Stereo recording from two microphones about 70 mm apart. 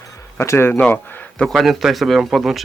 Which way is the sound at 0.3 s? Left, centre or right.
Left.